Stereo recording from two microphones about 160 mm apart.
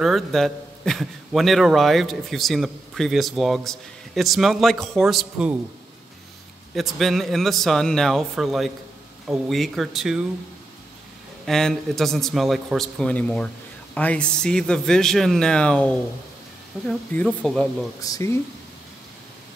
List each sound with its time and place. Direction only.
0.0 s a man's voice: centre (ahead or behind)
6.7 s a man's voice: centre (ahead or behind)
11.4 s a man's voice: centre (ahead or behind)
18.0 s speech: 20° left (ahead or behind)